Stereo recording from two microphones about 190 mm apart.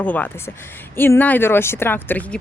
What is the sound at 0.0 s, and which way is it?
Speech, 10° left (ahead or behind).